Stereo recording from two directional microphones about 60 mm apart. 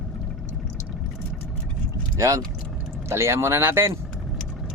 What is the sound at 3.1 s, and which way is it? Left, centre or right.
Speech, right.